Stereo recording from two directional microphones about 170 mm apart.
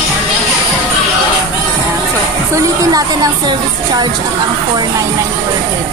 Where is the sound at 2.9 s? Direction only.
20° right (ahead or behind).